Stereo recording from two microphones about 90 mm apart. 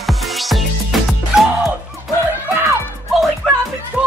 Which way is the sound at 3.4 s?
Centre (ahead or behind).